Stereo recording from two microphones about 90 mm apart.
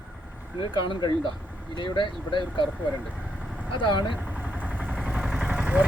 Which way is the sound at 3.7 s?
60° left (ahead or behind).